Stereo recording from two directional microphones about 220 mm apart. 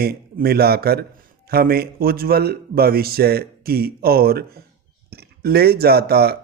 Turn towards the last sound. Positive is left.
turn(degrees=-45)  # may be behind; listen again after turning